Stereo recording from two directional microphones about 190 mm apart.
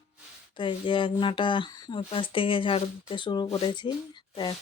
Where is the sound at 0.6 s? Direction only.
25° left (ahead or behind).